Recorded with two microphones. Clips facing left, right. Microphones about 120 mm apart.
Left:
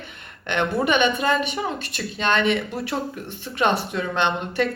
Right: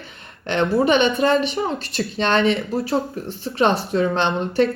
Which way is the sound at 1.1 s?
40° right (ahead or behind).